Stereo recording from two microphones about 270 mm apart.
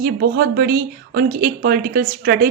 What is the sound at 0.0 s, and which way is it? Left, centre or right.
A woman's voice, right.